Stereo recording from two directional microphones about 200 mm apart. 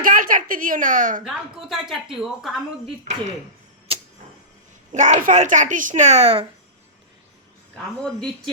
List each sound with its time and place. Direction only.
0.0 s a sound: 45° right (ahead or behind)
1.7 s a woman's voice: centre (ahead or behind)
3.0 s speech: 35° right (ahead or behind)
3.9 s tick-tock: 25° right (ahead or behind)
4.9 s speech: 40° right (ahead or behind)